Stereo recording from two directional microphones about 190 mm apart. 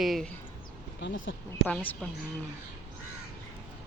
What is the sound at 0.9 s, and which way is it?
Speech, 80° left.